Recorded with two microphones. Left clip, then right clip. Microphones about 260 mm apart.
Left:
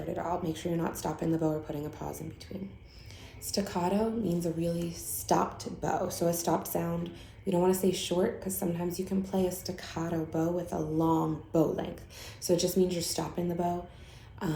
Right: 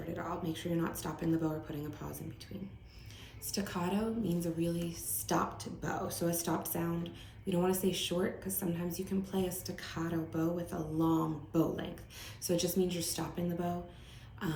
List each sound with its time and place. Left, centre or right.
0.2 s speech: centre
3.4 s speech: centre